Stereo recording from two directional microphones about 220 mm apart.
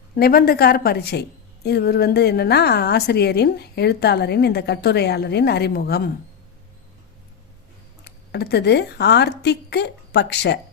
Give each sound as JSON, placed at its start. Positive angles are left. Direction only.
{"t": 0.2, "sound": "a woman's voice", "side_deg": 45}
{"t": 8.0, "sound": "speech", "side_deg": 45}